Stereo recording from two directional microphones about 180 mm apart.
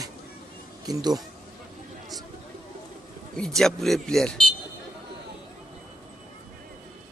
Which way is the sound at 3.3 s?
Centre (ahead or behind).